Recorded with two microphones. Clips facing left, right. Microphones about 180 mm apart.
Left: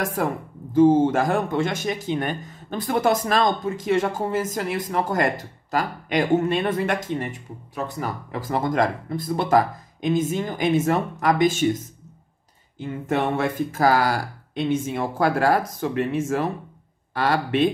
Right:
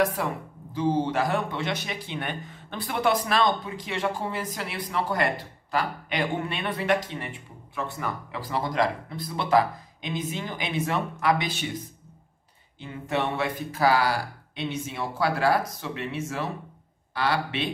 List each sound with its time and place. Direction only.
0.0 s speech: 45° left (ahead or behind)